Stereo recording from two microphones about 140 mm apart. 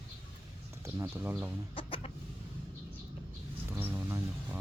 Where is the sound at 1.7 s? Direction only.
40° left (ahead or behind).